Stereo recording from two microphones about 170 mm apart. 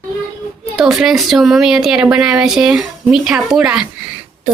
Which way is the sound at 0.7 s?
Centre (ahead or behind).